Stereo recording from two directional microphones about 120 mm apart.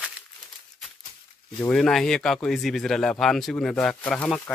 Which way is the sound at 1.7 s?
Centre (ahead or behind).